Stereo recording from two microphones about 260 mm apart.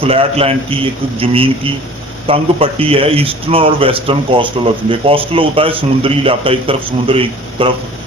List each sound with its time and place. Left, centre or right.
0.0 s speech: right